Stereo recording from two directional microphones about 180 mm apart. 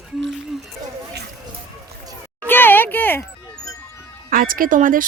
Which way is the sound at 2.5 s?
10° left (ahead or behind).